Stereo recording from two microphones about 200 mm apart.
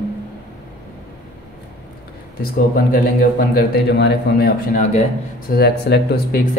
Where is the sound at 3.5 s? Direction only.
55° left (ahead or behind).